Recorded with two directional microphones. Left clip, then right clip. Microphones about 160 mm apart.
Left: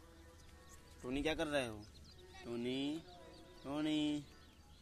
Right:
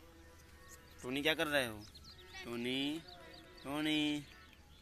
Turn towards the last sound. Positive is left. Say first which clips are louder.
# right 3 dB
turn(degrees=0)  # may be behind; listen again after turning